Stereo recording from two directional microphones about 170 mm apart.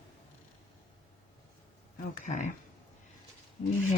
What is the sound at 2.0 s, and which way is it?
Speech, 45° left (ahead or behind).